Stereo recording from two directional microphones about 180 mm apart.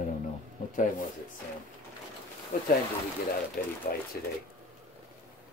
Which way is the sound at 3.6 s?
55° left (ahead or behind).